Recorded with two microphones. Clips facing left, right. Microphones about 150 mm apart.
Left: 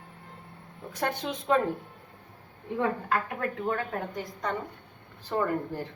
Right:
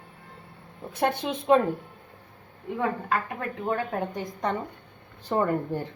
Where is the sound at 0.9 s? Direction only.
10° right (ahead or behind).